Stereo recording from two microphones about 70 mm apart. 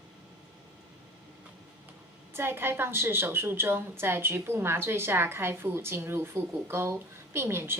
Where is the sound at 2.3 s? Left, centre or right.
Right.